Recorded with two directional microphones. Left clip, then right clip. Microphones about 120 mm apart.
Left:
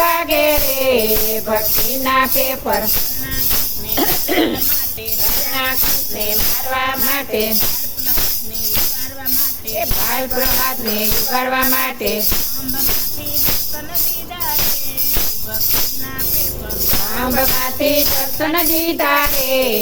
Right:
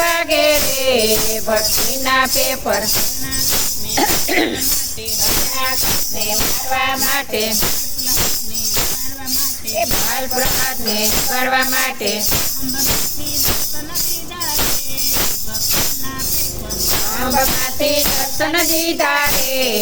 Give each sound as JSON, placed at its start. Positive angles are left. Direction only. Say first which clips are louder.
{"t": 0.0, "sound": "music", "louder": "even", "side_deg": 10}
{"t": 3.9, "sound": "cough", "louder": "right 1 dB", "side_deg": 5}
{"t": 6.7, "sound": "music", "louder": "right 2 dB", "side_deg": 20}
{"t": 10.2, "sound": "music", "louder": "even", "side_deg": 20}
{"t": 17.2, "sound": "music", "louder": "even", "side_deg": 25}